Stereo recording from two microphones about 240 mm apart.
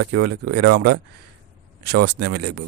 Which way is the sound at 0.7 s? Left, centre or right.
Right.